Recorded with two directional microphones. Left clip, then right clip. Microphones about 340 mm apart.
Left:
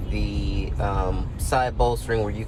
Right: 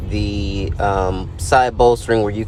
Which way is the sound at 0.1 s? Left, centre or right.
Right.